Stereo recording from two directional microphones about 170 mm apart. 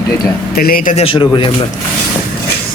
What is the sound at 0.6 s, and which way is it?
Speech, 60° left (ahead or behind).